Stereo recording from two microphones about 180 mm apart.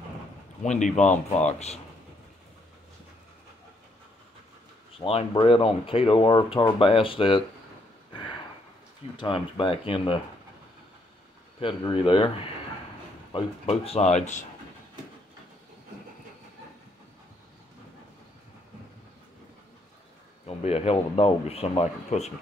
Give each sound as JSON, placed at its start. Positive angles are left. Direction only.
{"t": 0.7, "sound": "speech", "side_deg": 40}
{"t": 4.9, "sound": "speech", "side_deg": 30}
{"t": 9.1, "sound": "speech", "side_deg": 25}
{"t": 11.6, "sound": "speech", "side_deg": 30}
{"t": 13.3, "sound": "speech", "side_deg": 35}
{"t": 20.4, "sound": "speech", "side_deg": 35}